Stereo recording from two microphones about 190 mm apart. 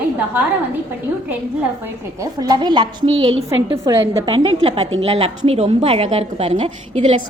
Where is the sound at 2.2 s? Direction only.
20° right (ahead or behind).